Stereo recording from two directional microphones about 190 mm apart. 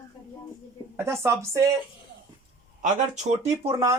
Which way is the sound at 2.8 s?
35° right (ahead or behind).